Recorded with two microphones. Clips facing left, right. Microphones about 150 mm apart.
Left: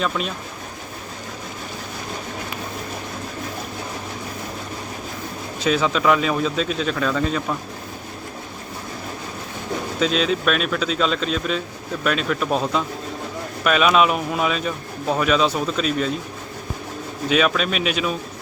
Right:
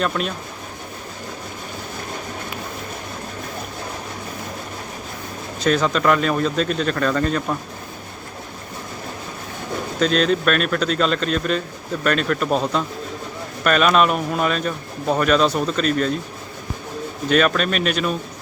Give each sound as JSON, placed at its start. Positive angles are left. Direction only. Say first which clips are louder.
{"t": 0.0, "sound": "speech", "louder": "right 2 dB", "side_deg": 0}
{"t": 5.6, "sound": "speech", "louder": "right 1 dB", "side_deg": 5}
{"t": 10.0, "sound": "speech", "louder": "right 3 dB", "side_deg": 0}
{"t": 17.2, "sound": "speech", "louder": "right 2 dB", "side_deg": 0}